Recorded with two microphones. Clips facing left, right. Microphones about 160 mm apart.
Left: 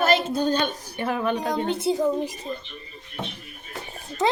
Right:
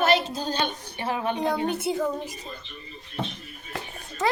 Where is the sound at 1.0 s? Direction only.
55° left (ahead or behind).